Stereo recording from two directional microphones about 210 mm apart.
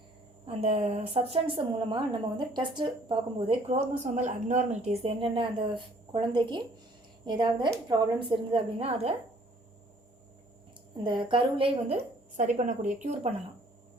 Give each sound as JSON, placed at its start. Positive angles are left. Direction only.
{"t": 0.4, "sound": "a woman's voice", "side_deg": -30}
{"t": 10.9, "sound": "a woman's voice", "side_deg": -25}